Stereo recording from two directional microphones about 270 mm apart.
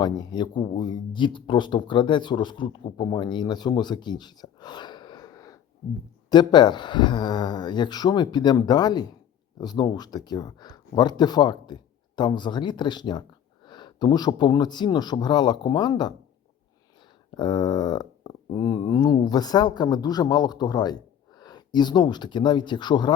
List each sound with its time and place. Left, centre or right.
0.0 s speech: centre
17.3 s speech: centre